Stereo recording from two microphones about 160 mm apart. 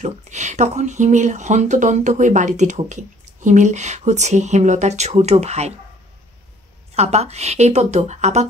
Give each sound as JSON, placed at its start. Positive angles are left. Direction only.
{"t": 0.0, "sound": "speech", "side_deg": -45}
{"t": 7.0, "sound": "speech", "side_deg": -40}